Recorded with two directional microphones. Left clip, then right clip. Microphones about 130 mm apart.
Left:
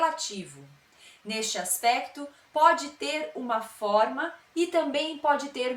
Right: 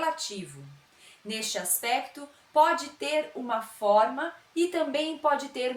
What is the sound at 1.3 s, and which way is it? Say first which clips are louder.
Speech: left 1 dB; 20° right (ahead or behind).